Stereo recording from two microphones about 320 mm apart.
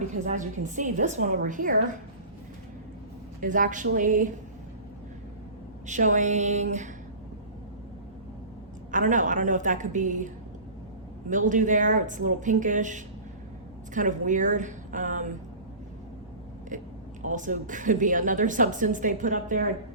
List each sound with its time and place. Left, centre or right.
0.3 s a woman's voice: right
3.4 s a woman's voice: right
5.8 s a woman's voice: right
8.9 s a woman's voice: right
17.2 s a woman's voice: right